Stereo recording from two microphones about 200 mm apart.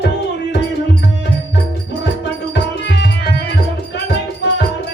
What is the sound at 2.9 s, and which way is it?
Tabla, 55° left (ahead or behind).